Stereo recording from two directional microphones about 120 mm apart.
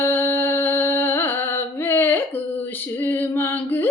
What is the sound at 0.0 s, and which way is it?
Music, 20° left (ahead or behind).